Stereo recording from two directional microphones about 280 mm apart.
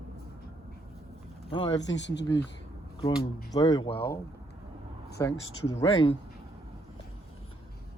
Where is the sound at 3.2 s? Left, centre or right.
Centre.